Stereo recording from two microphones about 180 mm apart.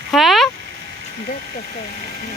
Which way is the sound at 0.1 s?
Centre (ahead or behind).